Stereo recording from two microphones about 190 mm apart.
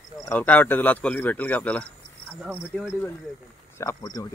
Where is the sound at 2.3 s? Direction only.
10° right (ahead or behind).